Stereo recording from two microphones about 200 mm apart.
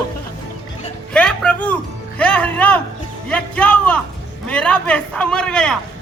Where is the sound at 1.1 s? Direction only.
5° left (ahead or behind).